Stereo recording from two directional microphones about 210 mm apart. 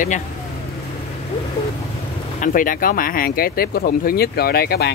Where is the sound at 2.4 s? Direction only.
40° left (ahead or behind).